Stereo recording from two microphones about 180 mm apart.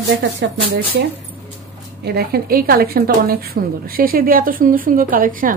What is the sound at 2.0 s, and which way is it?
A woman's voice, 60° right (ahead or behind).